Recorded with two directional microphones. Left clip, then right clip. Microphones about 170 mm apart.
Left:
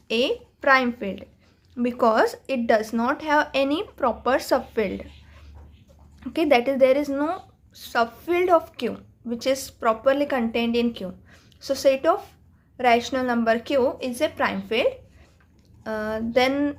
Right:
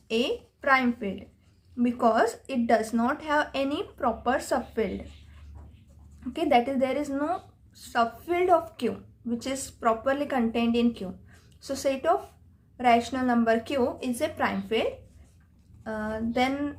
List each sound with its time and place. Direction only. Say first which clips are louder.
0.1 s a woman's voice: left 4 dB; 30° left (ahead or behind)
6.1 s a woman's voice: left 3 dB; 40° left (ahead or behind)